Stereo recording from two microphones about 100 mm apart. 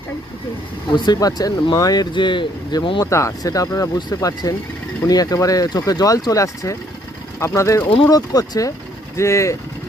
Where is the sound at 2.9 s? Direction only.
35° left (ahead or behind).